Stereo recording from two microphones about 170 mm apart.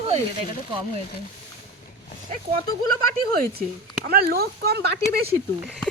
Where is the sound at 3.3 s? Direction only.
60° right (ahead or behind).